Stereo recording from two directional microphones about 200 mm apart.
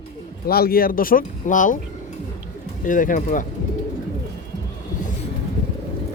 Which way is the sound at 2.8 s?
40° left (ahead or behind).